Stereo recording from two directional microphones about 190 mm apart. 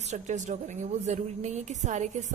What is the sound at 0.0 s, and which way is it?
A woman's voice, 40° right (ahead or behind).